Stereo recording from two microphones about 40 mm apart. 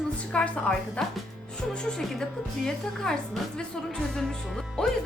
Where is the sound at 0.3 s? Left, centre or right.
Left.